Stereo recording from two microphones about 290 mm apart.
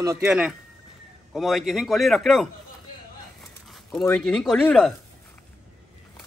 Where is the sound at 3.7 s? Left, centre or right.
Centre.